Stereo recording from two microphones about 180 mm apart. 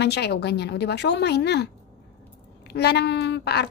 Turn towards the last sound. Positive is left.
turn(degrees=65)  # may be behind; listen again after turning